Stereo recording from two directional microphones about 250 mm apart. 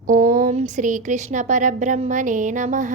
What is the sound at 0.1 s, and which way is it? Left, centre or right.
Speech, right.